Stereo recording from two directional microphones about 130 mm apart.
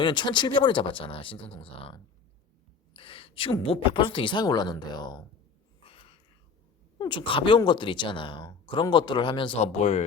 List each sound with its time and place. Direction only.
0.0 s a woman's voice: 35° left (ahead or behind)
5.9 s a sound: 45° left (ahead or behind)
7.0 s speech: 40° left (ahead or behind)
9.7 s speech: 60° left (ahead or behind)